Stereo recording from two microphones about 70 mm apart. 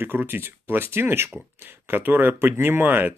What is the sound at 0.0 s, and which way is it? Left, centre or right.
Speech, right.